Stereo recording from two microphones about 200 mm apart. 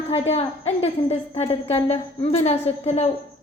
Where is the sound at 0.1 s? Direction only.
30° left (ahead or behind).